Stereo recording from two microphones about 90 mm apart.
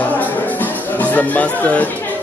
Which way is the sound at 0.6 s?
20° left (ahead or behind).